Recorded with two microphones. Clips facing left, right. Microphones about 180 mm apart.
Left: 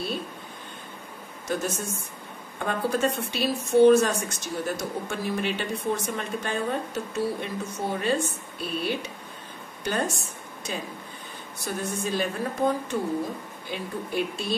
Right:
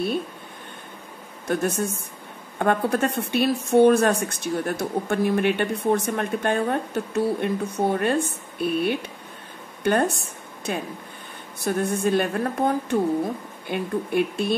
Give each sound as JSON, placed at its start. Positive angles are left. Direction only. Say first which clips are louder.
{"t": 1.5, "sound": "speech", "louder": "right 5 dB", "side_deg": -60}